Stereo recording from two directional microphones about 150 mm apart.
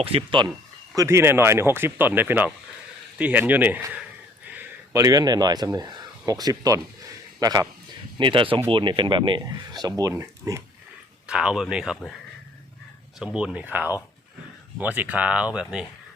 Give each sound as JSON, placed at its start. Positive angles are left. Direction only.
{"t": 0.0, "sound": "speech", "side_deg": -40}
{"t": 0.9, "sound": "speech", "side_deg": -20}
{"t": 4.9, "sound": "speech", "side_deg": -25}
{"t": 8.2, "sound": "speech", "side_deg": -35}
{"t": 11.3, "sound": "speech", "side_deg": -5}
{"t": 13.1, "sound": "speech", "side_deg": -5}